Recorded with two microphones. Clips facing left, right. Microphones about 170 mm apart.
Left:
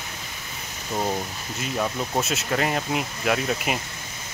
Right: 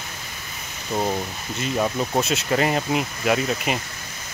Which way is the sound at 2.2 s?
Centre (ahead or behind).